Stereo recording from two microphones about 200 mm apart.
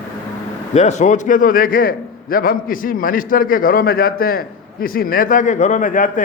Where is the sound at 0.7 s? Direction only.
35° left (ahead or behind).